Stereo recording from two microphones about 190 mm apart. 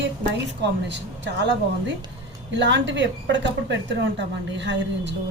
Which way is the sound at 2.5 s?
70° right (ahead or behind).